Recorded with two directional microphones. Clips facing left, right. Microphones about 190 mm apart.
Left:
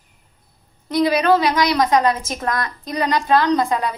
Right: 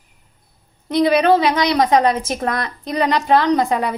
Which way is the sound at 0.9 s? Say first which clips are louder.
Right 2 dB; 25° right (ahead or behind).